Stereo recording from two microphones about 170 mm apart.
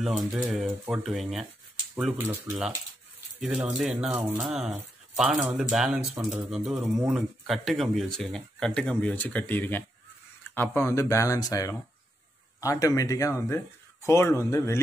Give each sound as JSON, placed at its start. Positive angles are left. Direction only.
{"t": 0.0, "sound": "speech", "side_deg": 0}
{"t": 3.3, "sound": "speech", "side_deg": -5}